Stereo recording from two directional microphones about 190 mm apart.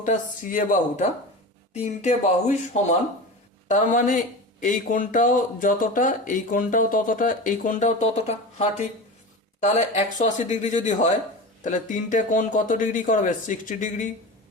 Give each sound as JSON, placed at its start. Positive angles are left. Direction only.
{"t": 0.0, "sound": "speech", "side_deg": 45}